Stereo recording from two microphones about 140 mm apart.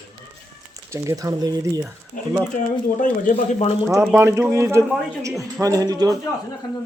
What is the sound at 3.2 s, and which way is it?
Speech, 65° left (ahead or behind).